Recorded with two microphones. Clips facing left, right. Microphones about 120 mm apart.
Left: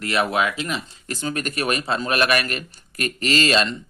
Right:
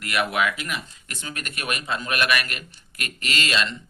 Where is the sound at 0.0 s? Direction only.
30° left (ahead or behind).